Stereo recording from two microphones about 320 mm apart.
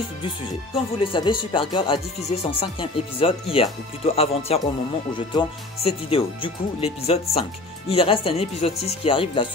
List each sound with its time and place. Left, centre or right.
1.0 s speech: centre